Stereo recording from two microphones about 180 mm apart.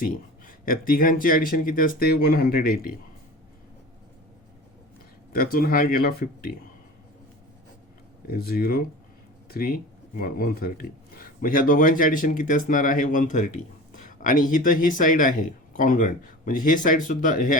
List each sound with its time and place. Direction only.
0.0 s speech: 50° left (ahead or behind)
5.3 s speech: 55° left (ahead or behind)
8.3 s speech: 55° left (ahead or behind)